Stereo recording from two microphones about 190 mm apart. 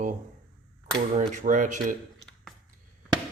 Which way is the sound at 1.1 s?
40° right (ahead or behind).